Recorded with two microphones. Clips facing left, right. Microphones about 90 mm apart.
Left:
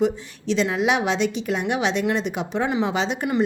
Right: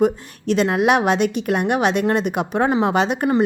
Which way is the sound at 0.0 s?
55° right (ahead or behind).